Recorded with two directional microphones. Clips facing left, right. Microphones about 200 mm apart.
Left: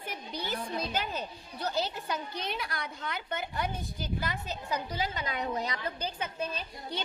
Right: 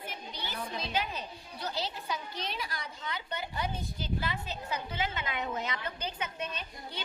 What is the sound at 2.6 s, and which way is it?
A woman's voice, 60° left (ahead or behind).